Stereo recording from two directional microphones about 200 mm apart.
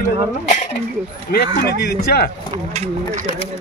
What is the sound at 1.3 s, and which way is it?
Speech, 50° left (ahead or behind).